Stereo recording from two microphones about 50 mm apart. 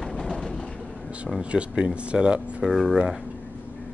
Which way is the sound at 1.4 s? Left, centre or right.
Right.